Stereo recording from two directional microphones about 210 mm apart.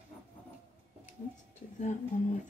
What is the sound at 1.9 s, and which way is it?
Speech, 35° left (ahead or behind).